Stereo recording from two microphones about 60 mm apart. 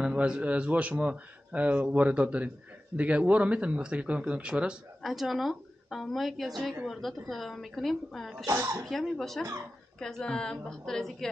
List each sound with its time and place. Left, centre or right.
0.0 s speech: centre
5.0 s a woman's voice: centre